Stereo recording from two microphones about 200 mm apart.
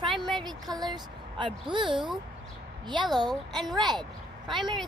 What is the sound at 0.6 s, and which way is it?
Speech, 20° right (ahead or behind).